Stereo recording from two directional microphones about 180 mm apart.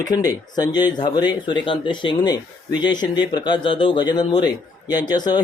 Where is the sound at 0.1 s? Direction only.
20° left (ahead or behind).